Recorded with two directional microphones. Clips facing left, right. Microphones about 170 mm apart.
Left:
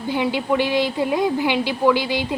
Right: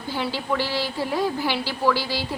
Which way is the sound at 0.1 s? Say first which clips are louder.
Left 5 dB; 15° left (ahead or behind).